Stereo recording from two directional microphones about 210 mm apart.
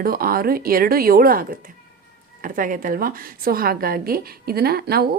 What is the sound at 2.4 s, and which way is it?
A woman's voice, 40° right (ahead or behind).